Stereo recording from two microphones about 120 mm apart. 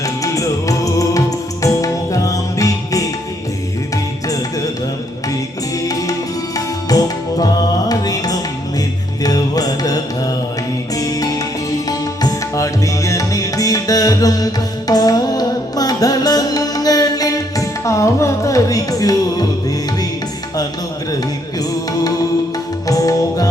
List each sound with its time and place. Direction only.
0.0 s music: 30° left (ahead or behind)
5.8 s music: 30° left (ahead or behind)
22.9 s music: 30° left (ahead or behind)